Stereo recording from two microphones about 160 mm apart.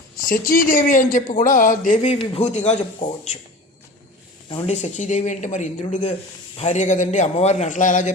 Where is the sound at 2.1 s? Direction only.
40° left (ahead or behind).